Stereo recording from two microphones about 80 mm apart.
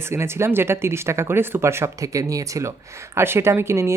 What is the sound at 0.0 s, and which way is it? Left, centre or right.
Speech, right.